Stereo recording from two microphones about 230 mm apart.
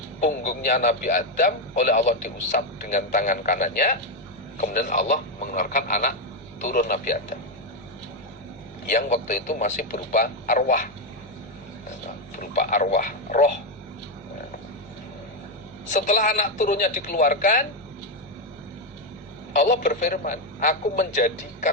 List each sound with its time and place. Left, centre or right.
0.2 s a man's voice: left
8.9 s a man's voice: left
12.4 s a man's voice: left
15.9 s a man's voice: left
19.5 s a man's voice: left